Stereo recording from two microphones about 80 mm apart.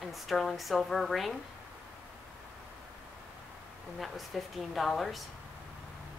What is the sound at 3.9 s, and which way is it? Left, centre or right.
A woman's voice, centre.